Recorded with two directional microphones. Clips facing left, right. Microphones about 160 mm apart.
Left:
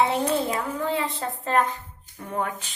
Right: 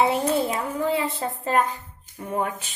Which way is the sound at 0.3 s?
10° right (ahead or behind).